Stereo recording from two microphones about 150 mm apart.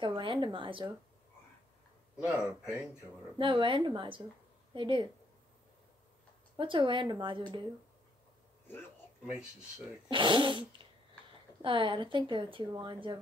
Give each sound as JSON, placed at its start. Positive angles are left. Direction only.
{"t": 0.0, "sound": "speech", "side_deg": -30}
{"t": 2.1, "sound": "speech", "side_deg": -10}
{"t": 3.3, "sound": "a woman's voice", "side_deg": -35}
{"t": 6.5, "sound": "a woman's voice", "side_deg": -35}
{"t": 9.2, "sound": "speech", "side_deg": -5}
{"t": 10.0, "sound": "a woman's voice", "side_deg": -30}
{"t": 10.8, "sound": "a sound", "side_deg": -35}
{"t": 11.6, "sound": "a woman's voice", "side_deg": -35}